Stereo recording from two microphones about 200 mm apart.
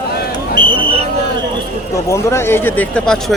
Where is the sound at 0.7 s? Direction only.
25° right (ahead or behind).